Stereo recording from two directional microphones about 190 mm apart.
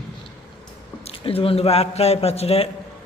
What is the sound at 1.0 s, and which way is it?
A man's voice, 30° left (ahead or behind).